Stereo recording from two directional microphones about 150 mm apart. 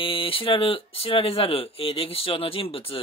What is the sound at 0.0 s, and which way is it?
Speech, 35° left (ahead or behind).